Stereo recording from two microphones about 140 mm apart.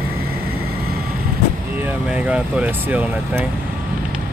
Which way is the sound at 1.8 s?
10° right (ahead or behind).